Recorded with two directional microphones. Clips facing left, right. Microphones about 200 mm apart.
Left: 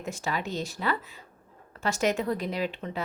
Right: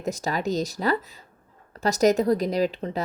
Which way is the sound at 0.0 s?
40° right (ahead or behind).